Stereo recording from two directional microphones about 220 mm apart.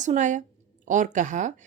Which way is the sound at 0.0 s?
35° right (ahead or behind).